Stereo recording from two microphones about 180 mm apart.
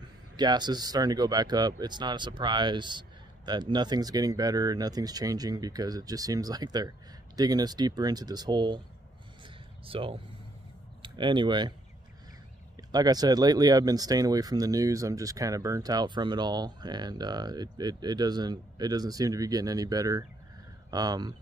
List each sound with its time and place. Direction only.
0.4 s speech: 25° right (ahead or behind)
9.8 s speech: 30° right (ahead or behind)
12.9 s speech: 20° right (ahead or behind)